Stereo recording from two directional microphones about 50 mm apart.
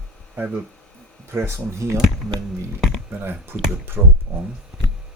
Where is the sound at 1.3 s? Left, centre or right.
Right.